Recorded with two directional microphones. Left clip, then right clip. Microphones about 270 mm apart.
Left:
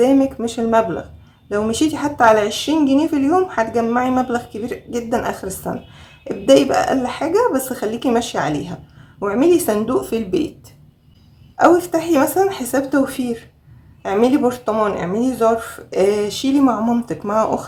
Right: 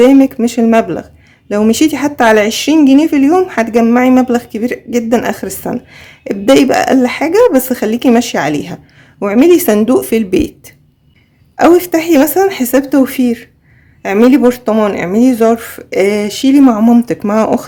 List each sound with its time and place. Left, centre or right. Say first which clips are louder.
0.0 s speech: right 8 dB; right
11.5 s speech: right 5 dB; right